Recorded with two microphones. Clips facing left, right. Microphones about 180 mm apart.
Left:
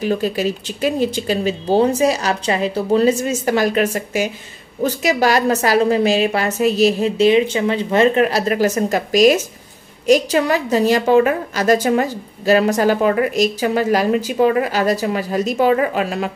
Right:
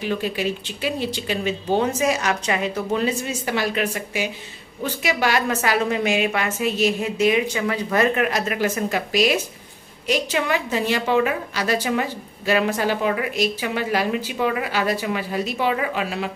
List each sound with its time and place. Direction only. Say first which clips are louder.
0.0 s a woman's voice: left 5 dB; 40° left (ahead or behind)